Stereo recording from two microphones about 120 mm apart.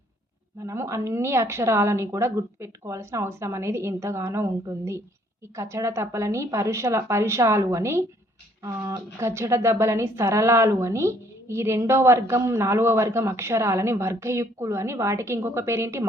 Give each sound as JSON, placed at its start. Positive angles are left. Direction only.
{"t": 0.6, "sound": "a woman's voice", "side_deg": -25}